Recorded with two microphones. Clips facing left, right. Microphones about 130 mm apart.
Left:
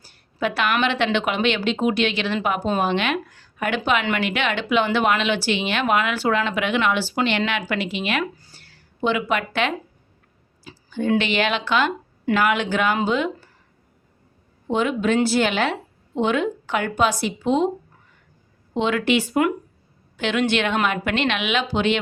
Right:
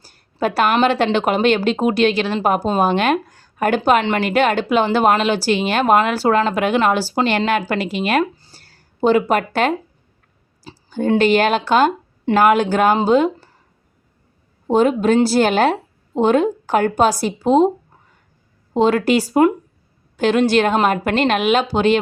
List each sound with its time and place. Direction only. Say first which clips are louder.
0.0 s a woman's voice: right 4 dB; 40° right (ahead or behind)
8.2 s a sound: right 7 dB; 30° right (ahead or behind)
8.6 s a woman's voice: right 7 dB; 40° right (ahead or behind)
14.7 s a woman's voice: right 6 dB; 40° right (ahead or behind)
18.7 s a woman's voice: right 5 dB; 40° right (ahead or behind)